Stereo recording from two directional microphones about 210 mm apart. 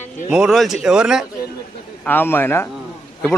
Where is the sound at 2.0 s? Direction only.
10° left (ahead or behind).